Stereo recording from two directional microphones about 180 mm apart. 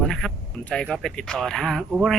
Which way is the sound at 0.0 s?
5° left (ahead or behind).